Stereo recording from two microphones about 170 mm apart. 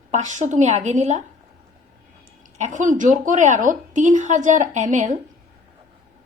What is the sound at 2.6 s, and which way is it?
A woman's voice, 45° right (ahead or behind).